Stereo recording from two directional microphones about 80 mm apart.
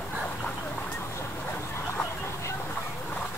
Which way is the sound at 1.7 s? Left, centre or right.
Left.